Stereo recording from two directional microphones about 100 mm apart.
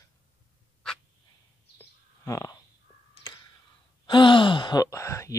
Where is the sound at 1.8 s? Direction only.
35° left (ahead or behind).